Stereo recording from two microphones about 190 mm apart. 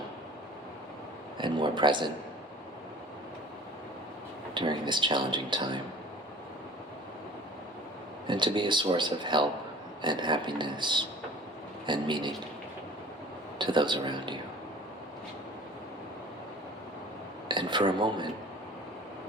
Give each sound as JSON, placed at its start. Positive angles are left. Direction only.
{"t": 1.4, "sound": "a man's voice", "side_deg": -25}
{"t": 4.5, "sound": "a man's voice", "side_deg": -25}
{"t": 8.3, "sound": "a man's voice", "side_deg": -25}
{"t": 13.6, "sound": "a man's voice", "side_deg": -25}
{"t": 17.5, "sound": "a man's voice", "side_deg": -25}